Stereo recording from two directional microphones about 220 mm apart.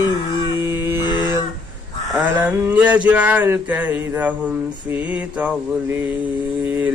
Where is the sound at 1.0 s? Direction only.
20° left (ahead or behind).